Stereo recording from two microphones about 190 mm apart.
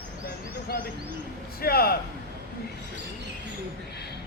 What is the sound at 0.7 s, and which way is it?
Speech, 50° left (ahead or behind).